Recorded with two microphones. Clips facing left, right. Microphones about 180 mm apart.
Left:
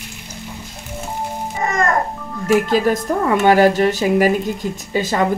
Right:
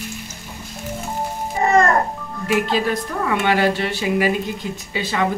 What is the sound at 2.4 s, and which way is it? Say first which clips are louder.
Speech: left 5 dB; 45° left (ahead or behind).